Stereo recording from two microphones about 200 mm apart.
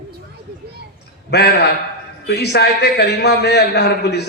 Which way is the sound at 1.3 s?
55° left (ahead or behind).